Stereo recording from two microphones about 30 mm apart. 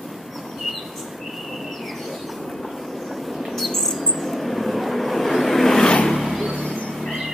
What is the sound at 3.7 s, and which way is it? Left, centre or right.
Vehicle, centre.